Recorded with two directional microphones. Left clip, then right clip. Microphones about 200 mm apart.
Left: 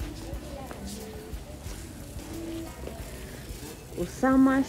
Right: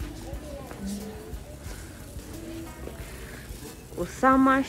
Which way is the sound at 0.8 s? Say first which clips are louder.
Right 3 dB; centre (ahead or behind).